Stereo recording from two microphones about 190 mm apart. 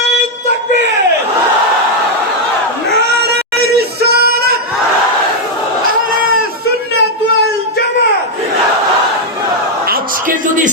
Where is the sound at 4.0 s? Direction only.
55° right (ahead or behind).